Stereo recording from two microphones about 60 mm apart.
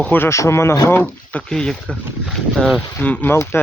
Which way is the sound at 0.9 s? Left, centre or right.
Left.